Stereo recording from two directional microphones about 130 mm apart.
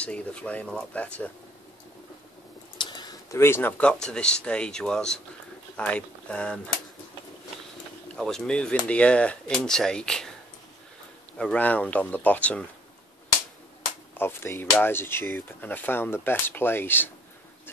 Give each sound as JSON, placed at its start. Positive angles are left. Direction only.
{"t": 0.0, "sound": "speech", "side_deg": 10}
{"t": 2.8, "sound": "speech", "side_deg": 30}
{"t": 8.2, "sound": "speech", "side_deg": 5}
{"t": 11.3, "sound": "speech", "side_deg": 10}
{"t": 14.1, "sound": "speech", "side_deg": 15}